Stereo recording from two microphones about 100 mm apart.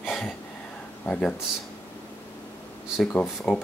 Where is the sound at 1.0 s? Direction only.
15° left (ahead or behind).